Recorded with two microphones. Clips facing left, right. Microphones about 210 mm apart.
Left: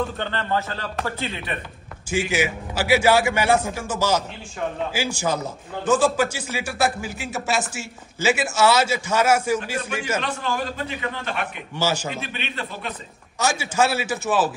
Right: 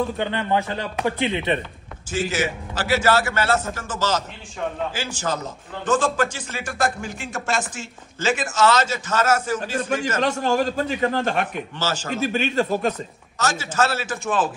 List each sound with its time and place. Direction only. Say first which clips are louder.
0.2 s a man's voice: right 3 dB; 15° right (ahead or behind)
2.0 s a man's voice: left 1 dB; 10° left (ahead or behind)
10.2 s a man's voice: right 6 dB; 45° right (ahead or behind)
11.7 s a man's voice: left 6 dB; 10° left (ahead or behind)
12.2 s a man's voice: right 10 dB; 45° right (ahead or behind)
13.4 s a man's voice: left 1 dB; 10° left (ahead or behind)